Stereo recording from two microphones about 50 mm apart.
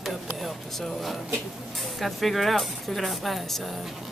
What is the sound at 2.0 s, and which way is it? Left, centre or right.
Speech, centre.